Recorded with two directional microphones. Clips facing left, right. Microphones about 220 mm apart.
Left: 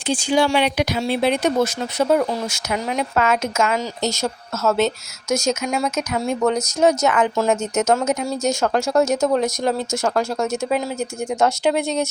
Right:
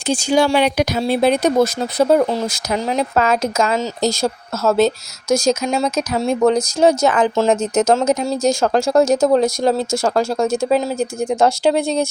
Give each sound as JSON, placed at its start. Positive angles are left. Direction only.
{"t": 0.1, "sound": "speech", "side_deg": -40}